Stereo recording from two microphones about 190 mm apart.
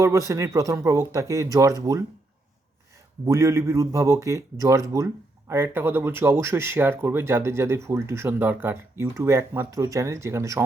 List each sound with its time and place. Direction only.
0.0 s speech: 15° right (ahead or behind)
3.2 s speech: 15° right (ahead or behind)